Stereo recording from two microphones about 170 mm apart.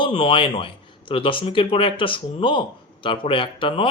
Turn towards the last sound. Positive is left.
turn(degrees=30)  # may be behind; listen again after turning